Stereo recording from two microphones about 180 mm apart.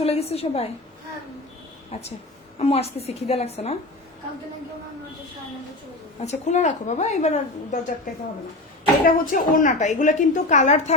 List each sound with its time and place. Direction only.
0.0 s a woman's voice: 35° left (ahead or behind)
1.9 s a woman's voice: 35° left (ahead or behind)
6.2 s a woman's voice: 40° left (ahead or behind)